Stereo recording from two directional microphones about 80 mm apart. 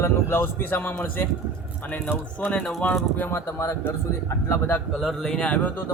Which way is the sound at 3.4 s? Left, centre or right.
Left.